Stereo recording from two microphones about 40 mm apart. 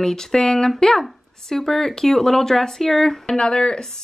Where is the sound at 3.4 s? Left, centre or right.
Left.